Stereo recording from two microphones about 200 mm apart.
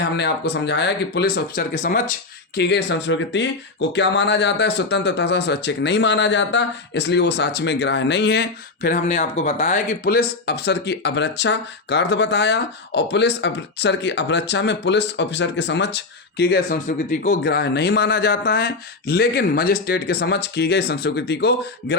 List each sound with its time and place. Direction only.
0.2 s speech: 55° left (ahead or behind)
2.6 s speech: 60° left (ahead or behind)